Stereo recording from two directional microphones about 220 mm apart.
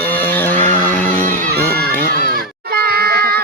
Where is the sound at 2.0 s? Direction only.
45° right (ahead or behind).